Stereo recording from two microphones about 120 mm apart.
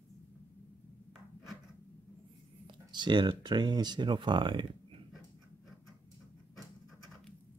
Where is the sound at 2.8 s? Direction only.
40° right (ahead or behind).